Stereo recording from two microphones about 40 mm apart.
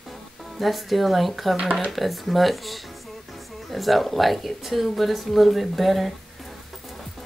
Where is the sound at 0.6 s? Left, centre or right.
Centre.